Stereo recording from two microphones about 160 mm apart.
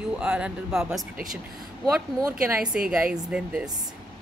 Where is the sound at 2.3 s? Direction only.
10° right (ahead or behind).